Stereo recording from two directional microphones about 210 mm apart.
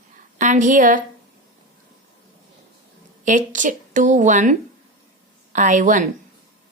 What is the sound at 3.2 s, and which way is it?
Speech, 35° right (ahead or behind).